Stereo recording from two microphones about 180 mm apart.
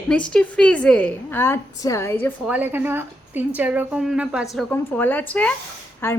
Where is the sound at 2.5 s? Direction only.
10° right (ahead or behind).